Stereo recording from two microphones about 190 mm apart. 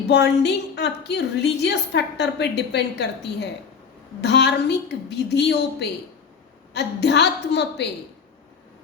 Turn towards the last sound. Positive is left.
turn(degrees=65)  # may be behind; listen again after turning